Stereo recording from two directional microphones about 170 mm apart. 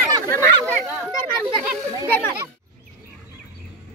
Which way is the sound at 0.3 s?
20° left (ahead or behind).